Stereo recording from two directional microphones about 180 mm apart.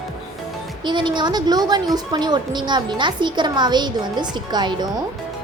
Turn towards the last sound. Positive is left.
turn(degrees=-25)  # may be behind; listen again after turning